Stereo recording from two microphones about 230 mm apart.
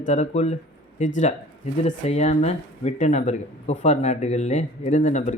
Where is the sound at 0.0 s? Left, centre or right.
Left.